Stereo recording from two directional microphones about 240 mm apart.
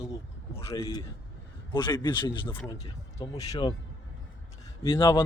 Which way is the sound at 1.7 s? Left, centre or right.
Centre.